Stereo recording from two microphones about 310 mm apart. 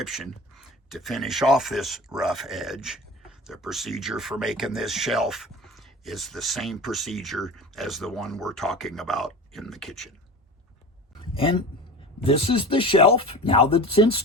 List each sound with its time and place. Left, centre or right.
0.0 s speech: centre
11.3 s speech: centre